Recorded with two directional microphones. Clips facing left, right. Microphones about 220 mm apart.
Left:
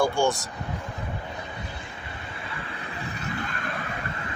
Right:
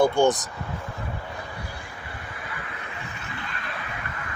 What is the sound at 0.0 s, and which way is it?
Speech, 20° right (ahead or behind).